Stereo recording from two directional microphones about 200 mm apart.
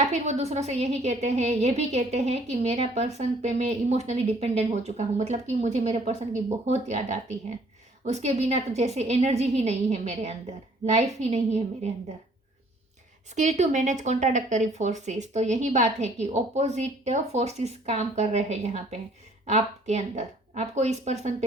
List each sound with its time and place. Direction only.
0.1 s a woman's voice: 35° right (ahead or behind)
13.3 s a woman's voice: 35° right (ahead or behind)